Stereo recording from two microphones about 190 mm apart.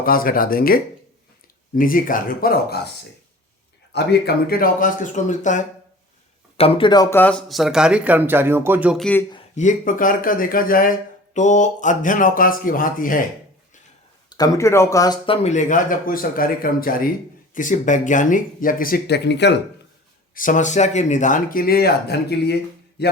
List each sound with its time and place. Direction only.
0.0 s speech: 50° left (ahead or behind)
3.9 s speech: 60° left (ahead or behind); by 5.6 s 40° left (ahead or behind)
6.6 s speech: 25° left (ahead or behind); by 9.0 s 5° right (ahead or behind)
9.6 s speech: 45° left (ahead or behind)
14.3 s speech: 20° left (ahead or behind)
15.4 s speech: 40° left (ahead or behind); by 19.5 s 65° left (ahead or behind)
20.3 s speech: 45° left (ahead or behind); by 23.0 s 60° left (ahead or behind)